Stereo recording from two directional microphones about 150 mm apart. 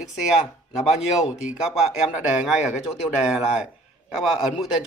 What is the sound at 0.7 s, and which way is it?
Speech, 50° left (ahead or behind).